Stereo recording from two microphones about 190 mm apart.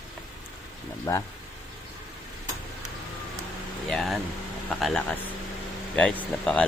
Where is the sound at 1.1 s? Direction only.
15° left (ahead or behind).